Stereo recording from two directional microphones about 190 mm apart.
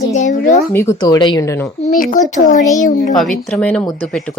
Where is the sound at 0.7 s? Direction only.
15° left (ahead or behind).